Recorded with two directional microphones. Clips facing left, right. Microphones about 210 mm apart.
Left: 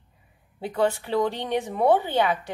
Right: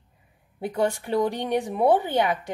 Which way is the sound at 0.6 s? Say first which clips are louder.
Left 1 dB; 15° right (ahead or behind).